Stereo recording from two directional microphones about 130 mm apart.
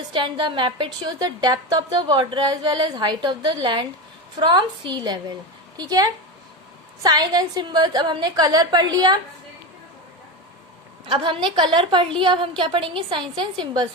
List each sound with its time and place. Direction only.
0.1 s a woman's voice: 40° right (ahead or behind)
11.0 s a woman's voice: 40° right (ahead or behind)